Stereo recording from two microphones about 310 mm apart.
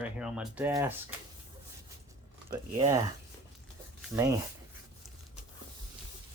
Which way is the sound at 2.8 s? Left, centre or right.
Centre.